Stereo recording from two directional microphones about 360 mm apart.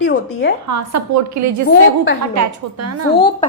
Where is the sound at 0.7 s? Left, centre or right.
Right.